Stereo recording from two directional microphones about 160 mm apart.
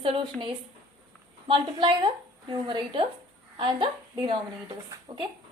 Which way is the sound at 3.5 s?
30° right (ahead or behind).